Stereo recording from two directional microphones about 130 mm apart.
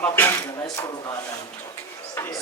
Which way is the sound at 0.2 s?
20° left (ahead or behind).